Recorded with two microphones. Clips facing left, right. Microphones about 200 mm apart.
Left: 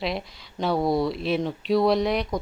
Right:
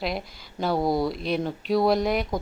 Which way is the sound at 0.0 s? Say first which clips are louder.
Left 1 dB; centre (ahead or behind).